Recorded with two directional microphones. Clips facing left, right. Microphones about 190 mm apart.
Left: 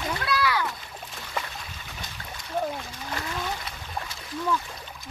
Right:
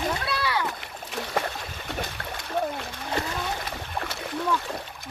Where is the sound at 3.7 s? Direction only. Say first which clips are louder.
Right 4 dB; 70° right (ahead or behind).